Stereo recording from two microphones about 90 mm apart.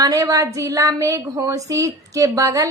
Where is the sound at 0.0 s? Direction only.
40° right (ahead or behind).